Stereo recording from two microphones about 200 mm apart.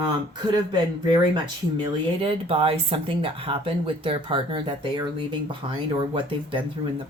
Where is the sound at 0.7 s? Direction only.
20° right (ahead or behind).